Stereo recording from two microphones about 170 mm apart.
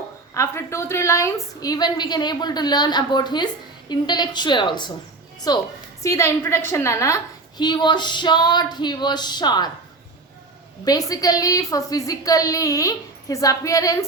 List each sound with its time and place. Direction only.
0.3 s a woman's voice: 15° left (ahead or behind)
10.8 s a woman's voice: 20° left (ahead or behind)